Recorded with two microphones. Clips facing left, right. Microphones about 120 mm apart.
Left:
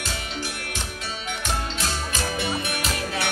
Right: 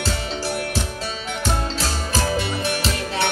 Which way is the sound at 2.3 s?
30° right (ahead or behind).